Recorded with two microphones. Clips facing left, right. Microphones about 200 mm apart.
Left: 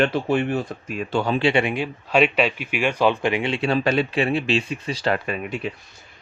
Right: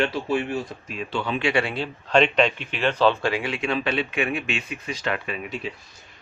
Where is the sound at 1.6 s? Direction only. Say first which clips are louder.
Left 4 dB; 15° left (ahead or behind); by 5.7 s 50° left (ahead or behind).